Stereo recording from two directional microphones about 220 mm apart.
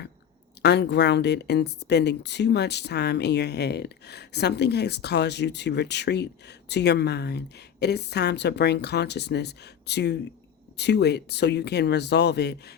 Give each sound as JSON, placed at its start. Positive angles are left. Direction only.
{"t": 0.6, "sound": "speech", "side_deg": 50}